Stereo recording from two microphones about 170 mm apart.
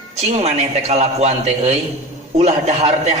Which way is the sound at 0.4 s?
40° right (ahead or behind).